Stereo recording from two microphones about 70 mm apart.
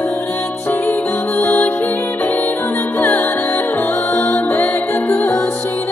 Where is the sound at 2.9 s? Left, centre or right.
Left.